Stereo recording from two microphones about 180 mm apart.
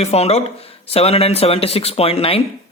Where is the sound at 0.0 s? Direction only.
35° left (ahead or behind).